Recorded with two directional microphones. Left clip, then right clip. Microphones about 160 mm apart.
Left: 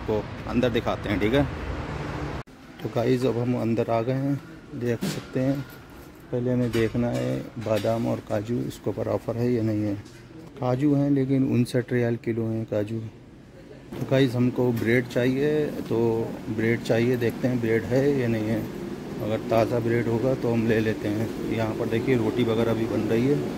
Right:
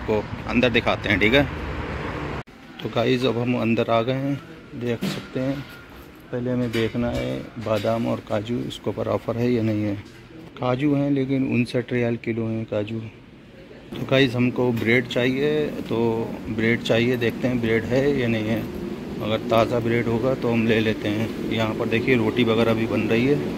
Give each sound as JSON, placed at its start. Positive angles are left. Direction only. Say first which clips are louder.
{"t": 0.1, "sound": "speech", "louder": "right 4 dB", "side_deg": 20}
{"t": 2.8, "sound": "speech", "louder": "right 3 dB", "side_deg": 20}
{"t": 4.8, "sound": "speech", "louder": "right 1 dB", "side_deg": 40}
{"t": 6.5, "sound": "speech", "louder": "right 1 dB", "side_deg": 45}
{"t": 8.8, "sound": "speech", "louder": "right 3 dB", "side_deg": 20}
{"t": 14.0, "sound": "speech", "louder": "right 3 dB", "side_deg": 20}